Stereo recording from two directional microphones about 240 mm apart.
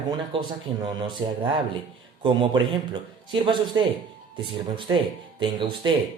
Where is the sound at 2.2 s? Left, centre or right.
Centre.